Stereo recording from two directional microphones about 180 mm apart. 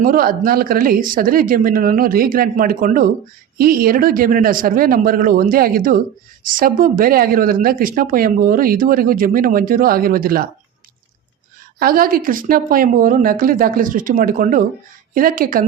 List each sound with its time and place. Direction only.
0.0 s speech: 50° right (ahead or behind)
11.8 s speech: 55° right (ahead or behind)